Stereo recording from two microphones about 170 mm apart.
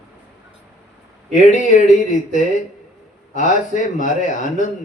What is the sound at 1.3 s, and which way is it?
Speech, 50° left (ahead or behind).